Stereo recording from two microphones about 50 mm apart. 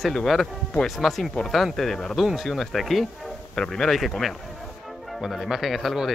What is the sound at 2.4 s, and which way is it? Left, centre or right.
Speech, centre.